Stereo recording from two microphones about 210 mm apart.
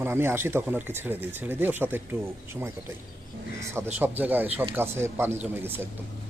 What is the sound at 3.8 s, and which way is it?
Speech, 10° right (ahead or behind).